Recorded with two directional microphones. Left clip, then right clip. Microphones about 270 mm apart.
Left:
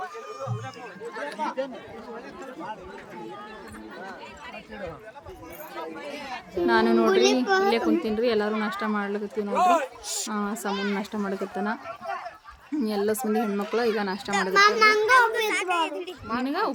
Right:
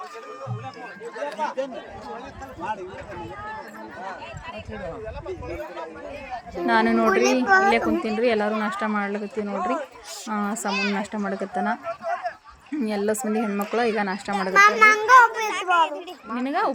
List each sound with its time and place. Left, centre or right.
1.2 s chatter: right
6.7 s speech: centre
9.6 s speech: left
10.3 s a child's voice: centre
10.7 s a child's voice: right
10.9 s speech: centre
15.0 s a sound: centre
16.4 s speech: centre